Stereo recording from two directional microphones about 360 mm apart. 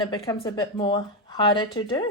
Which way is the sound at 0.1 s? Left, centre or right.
Centre.